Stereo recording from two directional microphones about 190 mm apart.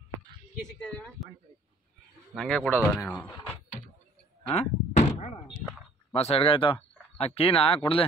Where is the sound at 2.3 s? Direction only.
Centre (ahead or behind).